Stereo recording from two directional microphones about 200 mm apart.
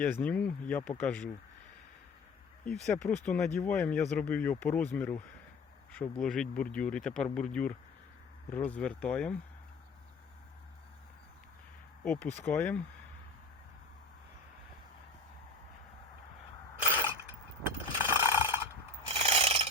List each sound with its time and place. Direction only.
0.0 s speech: 10° left (ahead or behind)
2.6 s speech: 5° left (ahead or behind)
12.0 s speech: 5° left (ahead or behind)
16.9 s a sound: 10° right (ahead or behind)
19.0 s filing: 30° right (ahead or behind)